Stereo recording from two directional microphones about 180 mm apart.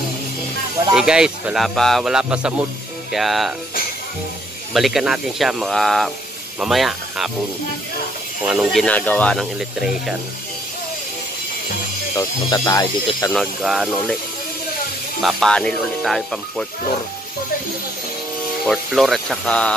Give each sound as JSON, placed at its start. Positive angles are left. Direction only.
{"t": 0.9, "sound": "speech", "side_deg": -5}
{"t": 4.7, "sound": "speech", "side_deg": 0}
{"t": 8.5, "sound": "speech", "side_deg": 0}
{"t": 12.2, "sound": "speech", "side_deg": 20}
{"t": 13.3, "sound": "speech", "side_deg": 0}
{"t": 15.2, "sound": "speech", "side_deg": 5}
{"t": 18.7, "sound": "speech", "side_deg": 0}